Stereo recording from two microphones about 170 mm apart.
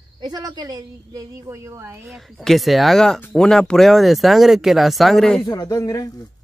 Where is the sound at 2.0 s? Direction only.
Centre (ahead or behind).